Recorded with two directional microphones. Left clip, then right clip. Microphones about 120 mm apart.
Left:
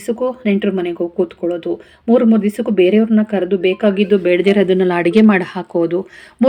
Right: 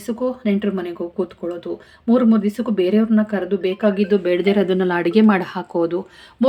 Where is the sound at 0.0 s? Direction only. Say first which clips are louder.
Left 4 dB; 15° left (ahead or behind).